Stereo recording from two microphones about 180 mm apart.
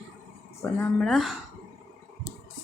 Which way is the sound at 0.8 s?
5° left (ahead or behind).